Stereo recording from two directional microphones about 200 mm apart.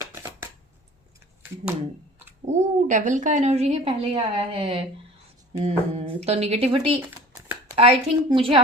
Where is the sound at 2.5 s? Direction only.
35° right (ahead or behind).